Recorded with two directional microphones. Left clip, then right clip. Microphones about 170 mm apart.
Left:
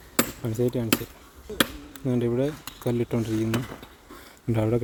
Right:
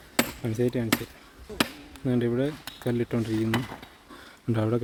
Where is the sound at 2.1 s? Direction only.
10° right (ahead or behind).